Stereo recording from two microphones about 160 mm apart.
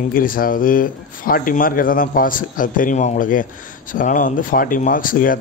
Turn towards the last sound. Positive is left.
turn(degrees=60)  # may be behind; listen again after turning